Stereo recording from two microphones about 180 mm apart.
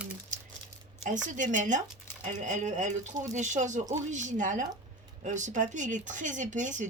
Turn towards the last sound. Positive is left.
turn(degrees=-45)  # may be behind; listen again after turning